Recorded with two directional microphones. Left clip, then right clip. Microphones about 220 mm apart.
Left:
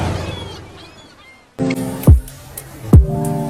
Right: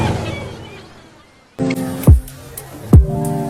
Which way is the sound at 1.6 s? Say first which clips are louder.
Even; centre (ahead or behind).